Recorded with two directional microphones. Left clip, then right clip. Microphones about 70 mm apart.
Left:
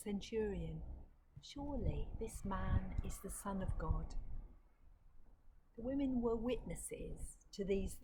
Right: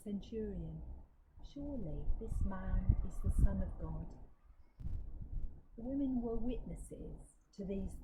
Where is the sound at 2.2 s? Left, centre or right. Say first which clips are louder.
Left 4 dB; left.